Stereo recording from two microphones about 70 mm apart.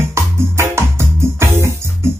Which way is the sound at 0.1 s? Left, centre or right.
Right.